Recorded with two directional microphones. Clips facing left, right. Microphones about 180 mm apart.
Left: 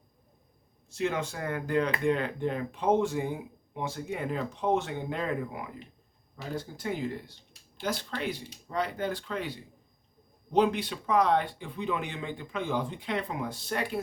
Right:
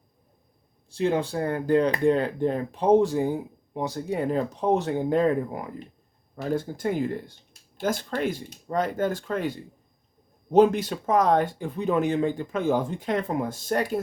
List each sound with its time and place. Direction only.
0.9 s speech: 30° right (ahead or behind)